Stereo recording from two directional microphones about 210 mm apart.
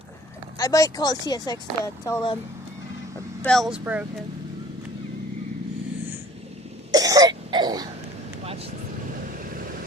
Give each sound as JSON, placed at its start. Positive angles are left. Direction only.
{"t": 0.6, "sound": "speech", "side_deg": 15}
{"t": 3.4, "sound": "speech", "side_deg": 0}
{"t": 6.9, "sound": "throat clearing", "side_deg": -15}